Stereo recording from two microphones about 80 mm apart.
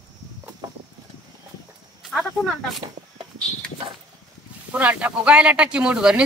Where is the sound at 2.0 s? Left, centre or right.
Centre.